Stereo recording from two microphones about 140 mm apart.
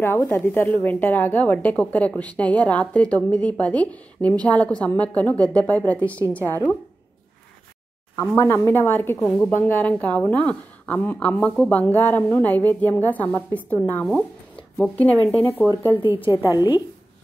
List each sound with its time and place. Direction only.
0.0 s a woman's voice: 15° left (ahead or behind)
8.6 s a woman's voice: 15° left (ahead or behind)
16.1 s a woman's voice: 20° right (ahead or behind)
16.5 s speech: 30° left (ahead or behind)